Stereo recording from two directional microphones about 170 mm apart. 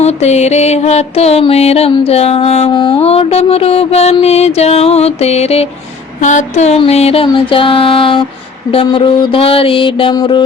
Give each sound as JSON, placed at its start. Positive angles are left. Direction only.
{"t": 0.0, "sound": "music", "side_deg": 40}